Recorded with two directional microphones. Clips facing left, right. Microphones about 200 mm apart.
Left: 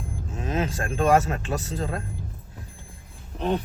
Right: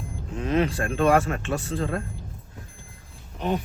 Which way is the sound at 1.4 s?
40° left (ahead or behind).